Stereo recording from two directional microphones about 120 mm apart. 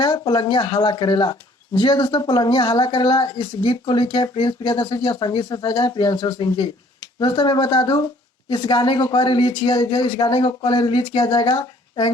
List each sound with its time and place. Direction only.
0.0 s speech: 35° left (ahead or behind)